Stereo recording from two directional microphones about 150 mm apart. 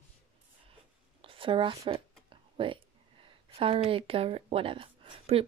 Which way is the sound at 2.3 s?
35° right (ahead or behind).